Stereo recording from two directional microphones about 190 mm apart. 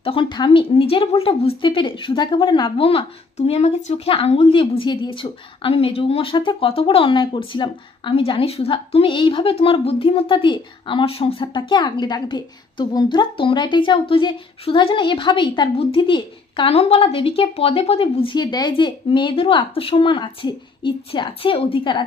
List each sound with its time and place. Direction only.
0.0 s a woman's voice: 25° left (ahead or behind)